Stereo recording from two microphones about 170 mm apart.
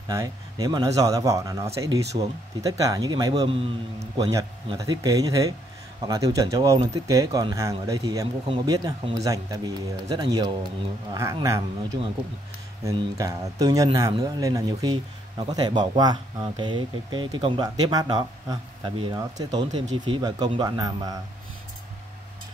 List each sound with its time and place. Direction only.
0.1 s speech: 20° right (ahead or behind)
4.0 s speech: 20° right (ahead or behind)
12.8 s speech: 25° right (ahead or behind)